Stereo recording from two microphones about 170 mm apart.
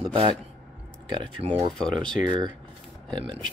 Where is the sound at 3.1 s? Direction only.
30° right (ahead or behind).